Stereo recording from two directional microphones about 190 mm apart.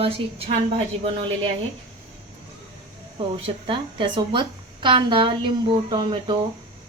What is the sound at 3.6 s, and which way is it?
A woman's voice, 30° right (ahead or behind).